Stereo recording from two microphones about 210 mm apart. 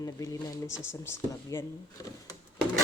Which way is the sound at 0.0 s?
15° left (ahead or behind).